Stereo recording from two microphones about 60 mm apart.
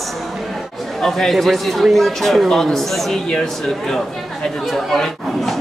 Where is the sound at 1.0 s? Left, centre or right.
Centre.